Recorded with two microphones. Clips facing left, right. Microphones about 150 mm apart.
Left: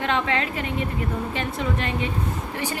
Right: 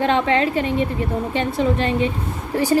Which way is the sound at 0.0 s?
30° right (ahead or behind).